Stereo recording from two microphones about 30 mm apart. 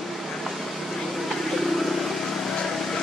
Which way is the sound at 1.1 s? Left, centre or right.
Centre.